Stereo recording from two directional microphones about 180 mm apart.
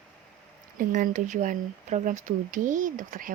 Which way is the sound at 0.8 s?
45° right (ahead or behind).